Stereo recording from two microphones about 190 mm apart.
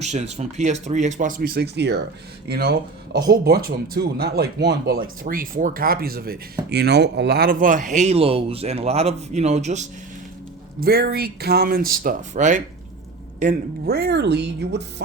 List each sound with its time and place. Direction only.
0.0 s speech: 35° right (ahead or behind)
10.8 s speech: 55° right (ahead or behind)